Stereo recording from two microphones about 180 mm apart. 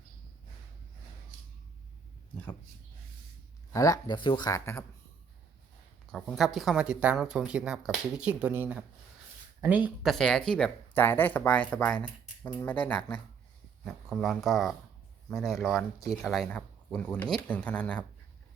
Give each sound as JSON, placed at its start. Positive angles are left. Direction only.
{"t": 3.7, "sound": "speech", "side_deg": 20}
{"t": 6.1, "sound": "speech", "side_deg": 0}